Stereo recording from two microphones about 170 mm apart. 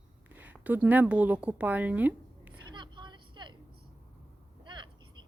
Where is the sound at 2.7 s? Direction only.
25° right (ahead or behind).